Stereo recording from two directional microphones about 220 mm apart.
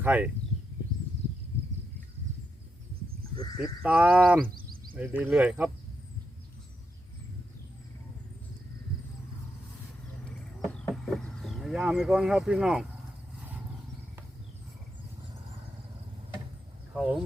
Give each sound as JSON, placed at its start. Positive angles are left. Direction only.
{"t": 0.0, "sound": "speech", "side_deg": -5}
{"t": 3.8, "sound": "speech", "side_deg": -5}
{"t": 4.4, "sound": "a sound", "side_deg": -40}
{"t": 5.2, "sound": "speech", "side_deg": -5}
{"t": 10.6, "sound": "chicken", "side_deg": 0}
{"t": 16.9, "sound": "speech", "side_deg": 0}